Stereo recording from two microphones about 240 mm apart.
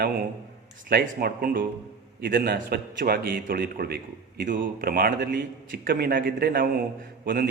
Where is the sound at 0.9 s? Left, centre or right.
Right.